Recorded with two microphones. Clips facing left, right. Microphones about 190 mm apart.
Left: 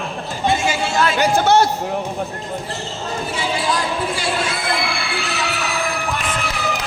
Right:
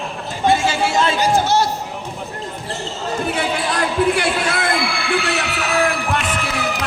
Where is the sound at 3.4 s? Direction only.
60° right (ahead or behind).